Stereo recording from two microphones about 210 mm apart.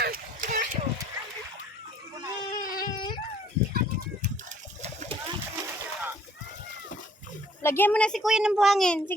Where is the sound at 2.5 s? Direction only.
45° left (ahead or behind).